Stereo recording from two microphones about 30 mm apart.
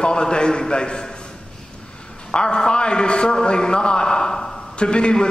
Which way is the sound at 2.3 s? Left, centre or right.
Left.